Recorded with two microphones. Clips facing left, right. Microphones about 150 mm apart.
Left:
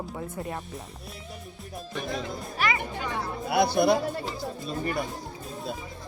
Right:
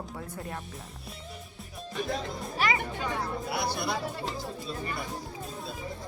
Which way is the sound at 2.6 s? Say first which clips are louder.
Even; 30° right (ahead or behind).